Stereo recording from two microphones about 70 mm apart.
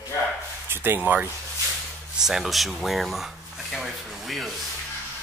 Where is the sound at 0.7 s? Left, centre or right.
Right.